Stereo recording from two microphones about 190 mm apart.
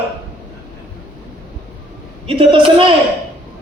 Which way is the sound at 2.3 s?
30° right (ahead or behind).